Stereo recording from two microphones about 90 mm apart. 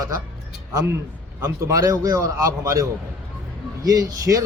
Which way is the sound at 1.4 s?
35° right (ahead or behind).